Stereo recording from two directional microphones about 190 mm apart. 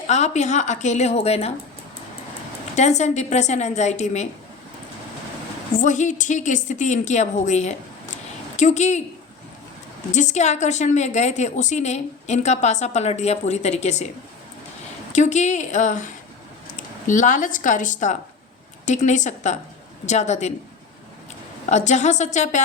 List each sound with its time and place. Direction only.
0.1 s a woman's voice: 35° left (ahead or behind)
2.7 s a woman's voice: 35° left (ahead or behind)
5.7 s a woman's voice: 40° left (ahead or behind)
10.1 s a woman's voice: 40° left (ahead or behind)
15.1 s a woman's voice: 40° left (ahead or behind)
21.7 s a woman's voice: 40° left (ahead or behind)